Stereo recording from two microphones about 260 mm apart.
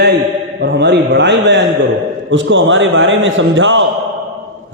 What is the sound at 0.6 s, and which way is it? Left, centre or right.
A man's voice, right.